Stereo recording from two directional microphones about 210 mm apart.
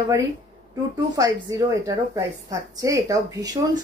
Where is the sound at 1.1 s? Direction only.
15° right (ahead or behind).